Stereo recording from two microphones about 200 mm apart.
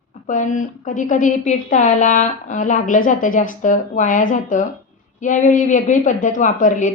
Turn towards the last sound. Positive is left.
turn(degrees=40)  # may be behind; listen again after turning